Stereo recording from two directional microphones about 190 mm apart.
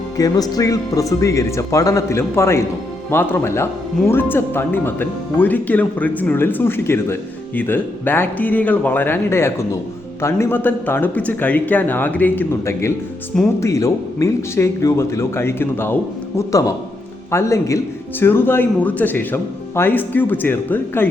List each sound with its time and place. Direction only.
0.2 s a man's voice: 20° left (ahead or behind)